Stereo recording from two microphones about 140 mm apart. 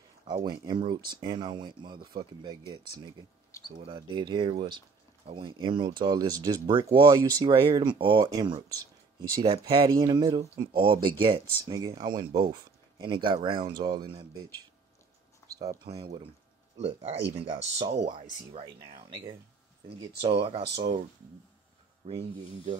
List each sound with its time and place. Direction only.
0.5 s speech: 30° right (ahead or behind)
3.6 s speech: 35° right (ahead or behind)
11.6 s speech: 25° right (ahead or behind)
15.8 s speech: 35° right (ahead or behind)
16.7 s speech: 50° right (ahead or behind)
22.0 s speech: 45° right (ahead or behind)